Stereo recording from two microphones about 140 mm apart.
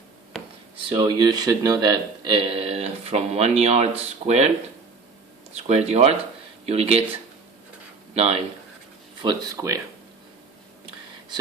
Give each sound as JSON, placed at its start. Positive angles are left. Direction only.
{"t": 0.9, "sound": "speech", "side_deg": -30}
{"t": 5.5, "sound": "speech", "side_deg": -55}
{"t": 8.1, "sound": "speech", "side_deg": -45}
{"t": 9.2, "sound": "speech", "side_deg": -25}